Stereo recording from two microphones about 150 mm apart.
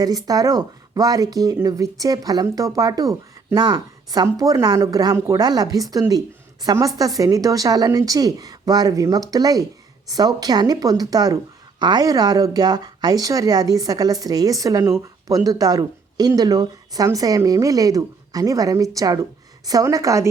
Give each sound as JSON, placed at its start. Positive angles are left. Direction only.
{"t": 0.0, "sound": "speech", "side_deg": -25}